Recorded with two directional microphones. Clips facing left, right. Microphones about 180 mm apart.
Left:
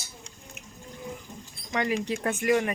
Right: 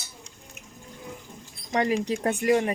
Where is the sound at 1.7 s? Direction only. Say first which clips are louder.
Right 3 dB; 35° right (ahead or behind).